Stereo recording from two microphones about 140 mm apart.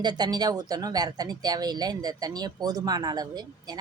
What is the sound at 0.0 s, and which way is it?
Speech, 30° right (ahead or behind).